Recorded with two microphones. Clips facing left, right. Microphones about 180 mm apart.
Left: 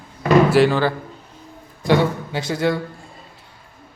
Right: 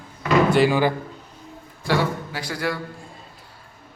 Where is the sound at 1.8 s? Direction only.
20° left (ahead or behind).